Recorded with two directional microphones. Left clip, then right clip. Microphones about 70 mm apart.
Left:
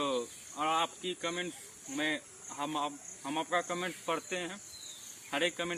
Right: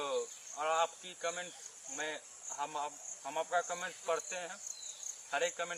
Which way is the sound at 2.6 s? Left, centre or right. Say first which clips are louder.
Left 4 dB; centre.